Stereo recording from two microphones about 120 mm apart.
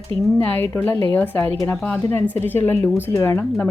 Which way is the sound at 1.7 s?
5° left (ahead or behind).